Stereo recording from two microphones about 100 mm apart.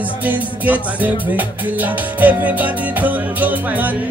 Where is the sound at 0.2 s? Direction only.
15° right (ahead or behind).